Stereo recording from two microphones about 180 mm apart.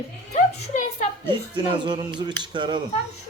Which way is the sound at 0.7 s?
45° left (ahead or behind).